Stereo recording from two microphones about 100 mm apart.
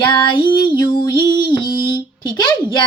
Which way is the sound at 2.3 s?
50° left (ahead or behind).